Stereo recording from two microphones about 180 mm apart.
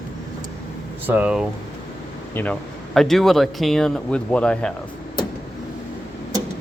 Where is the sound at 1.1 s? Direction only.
10° right (ahead or behind).